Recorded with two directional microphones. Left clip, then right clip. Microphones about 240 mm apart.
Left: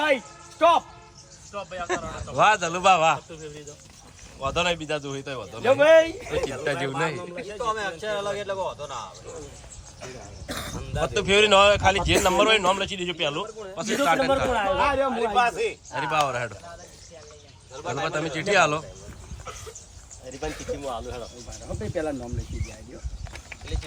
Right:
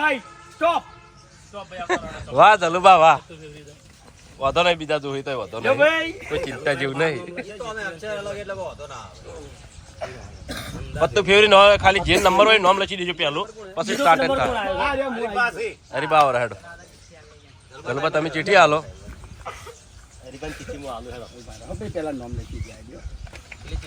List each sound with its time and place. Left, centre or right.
0.6 s speech: centre
4.4 s speech: centre
5.6 s a man's voice: left
6.3 s speech: centre
7.6 s speech: centre
10.5 s speech: centre
15.1 s speech: centre
17.9 s speech: centre
20.7 s speech: centre
21.7 s speech: centre